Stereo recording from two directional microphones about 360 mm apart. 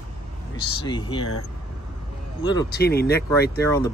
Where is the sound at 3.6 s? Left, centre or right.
Centre.